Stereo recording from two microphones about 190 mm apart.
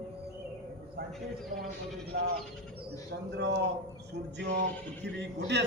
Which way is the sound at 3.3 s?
60° right (ahead or behind).